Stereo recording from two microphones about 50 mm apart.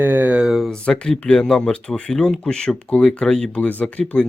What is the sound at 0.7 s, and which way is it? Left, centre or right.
Speech, centre.